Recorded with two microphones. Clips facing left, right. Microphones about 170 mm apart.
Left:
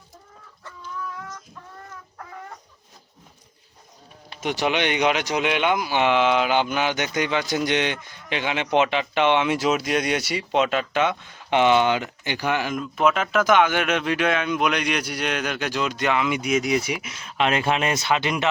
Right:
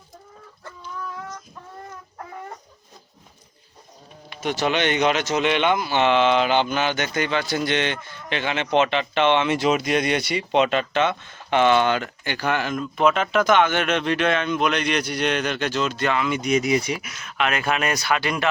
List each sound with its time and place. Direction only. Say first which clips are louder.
4.4 s speech: right 1 dB; 15° left (ahead or behind)
17.0 s speech: left 1 dB; 25° left (ahead or behind)